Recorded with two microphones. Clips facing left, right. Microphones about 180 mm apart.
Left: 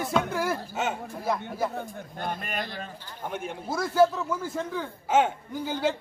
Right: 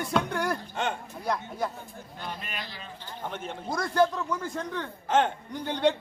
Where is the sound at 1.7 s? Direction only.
50° left (ahead or behind).